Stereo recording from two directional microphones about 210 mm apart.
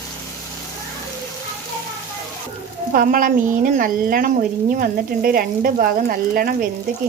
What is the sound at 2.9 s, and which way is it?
Speech, 40° right (ahead or behind).